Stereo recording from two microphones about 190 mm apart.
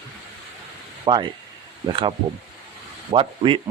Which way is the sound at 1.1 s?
25° right (ahead or behind).